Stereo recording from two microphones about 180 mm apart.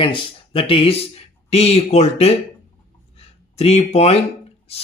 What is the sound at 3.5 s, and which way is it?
Speech, 35° left (ahead or behind).